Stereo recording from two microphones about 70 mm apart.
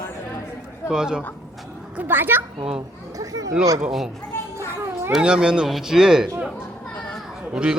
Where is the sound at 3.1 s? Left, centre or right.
Right.